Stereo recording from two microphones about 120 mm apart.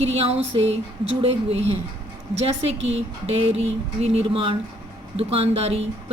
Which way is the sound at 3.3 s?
55° right (ahead or behind).